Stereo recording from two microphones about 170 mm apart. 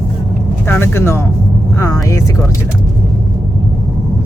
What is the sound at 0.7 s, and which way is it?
Speech, 15° left (ahead or behind).